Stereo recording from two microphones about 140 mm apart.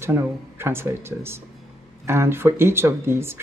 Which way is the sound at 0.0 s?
15° right (ahead or behind).